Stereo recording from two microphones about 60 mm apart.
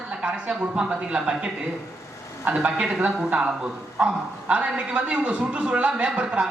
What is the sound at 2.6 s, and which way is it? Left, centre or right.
A man's voice, right.